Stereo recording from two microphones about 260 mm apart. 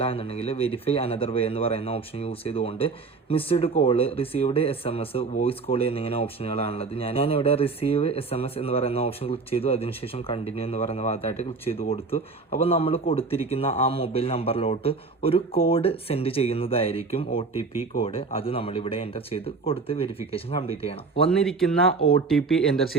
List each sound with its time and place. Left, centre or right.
0.0 s speech: left
21.2 s speech: centre